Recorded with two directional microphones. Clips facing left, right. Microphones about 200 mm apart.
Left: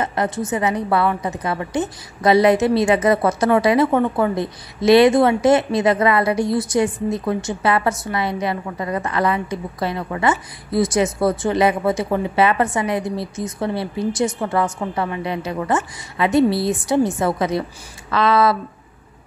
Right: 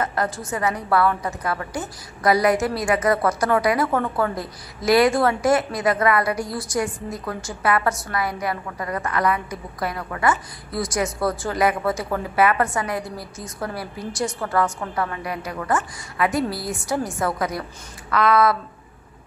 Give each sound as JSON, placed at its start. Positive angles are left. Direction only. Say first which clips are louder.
{"t": 0.0, "sound": "a woman's voice", "louder": "left 3 dB", "side_deg": 20}